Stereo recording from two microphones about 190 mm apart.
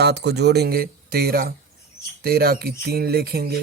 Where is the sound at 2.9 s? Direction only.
55° right (ahead or behind).